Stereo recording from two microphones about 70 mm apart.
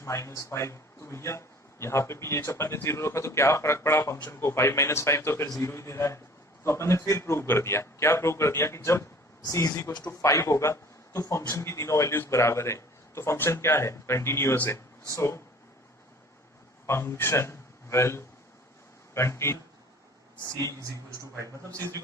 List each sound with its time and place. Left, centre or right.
0.0 s a man's voice: left
15.1 s speech: left
16.8 s a man's voice: left
21.2 s a man's voice: right